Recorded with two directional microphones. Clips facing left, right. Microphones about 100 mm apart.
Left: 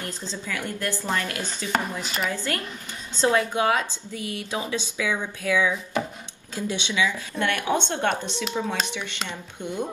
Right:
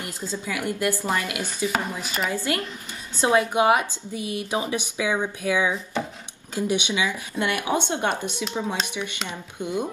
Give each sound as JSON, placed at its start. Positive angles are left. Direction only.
{"t": 0.0, "sound": "speech", "side_deg": -15}
{"t": 2.3, "sound": "a woman's voice", "side_deg": -15}